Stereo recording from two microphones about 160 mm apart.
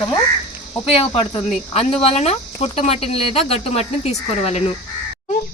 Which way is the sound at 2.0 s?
40° left (ahead or behind).